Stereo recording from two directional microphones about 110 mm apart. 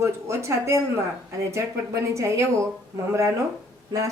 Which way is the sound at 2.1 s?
25° right (ahead or behind).